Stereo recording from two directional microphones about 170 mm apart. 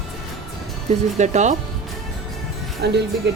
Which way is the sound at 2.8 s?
85° right.